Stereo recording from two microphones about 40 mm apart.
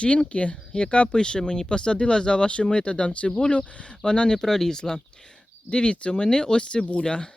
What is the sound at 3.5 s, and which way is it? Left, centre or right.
Speech, left.